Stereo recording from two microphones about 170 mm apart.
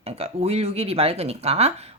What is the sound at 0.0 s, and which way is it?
Speech, 35° right (ahead or behind).